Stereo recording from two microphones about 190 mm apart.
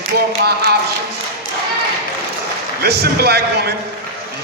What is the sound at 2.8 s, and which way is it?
Speech, 55° right (ahead or behind).